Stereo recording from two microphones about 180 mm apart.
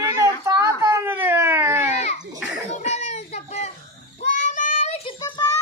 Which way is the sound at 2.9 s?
40° left (ahead or behind).